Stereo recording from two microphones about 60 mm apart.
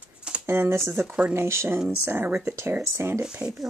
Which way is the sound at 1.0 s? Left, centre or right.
Right.